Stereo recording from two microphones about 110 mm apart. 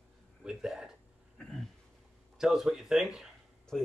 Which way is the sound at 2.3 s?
5° right (ahead or behind).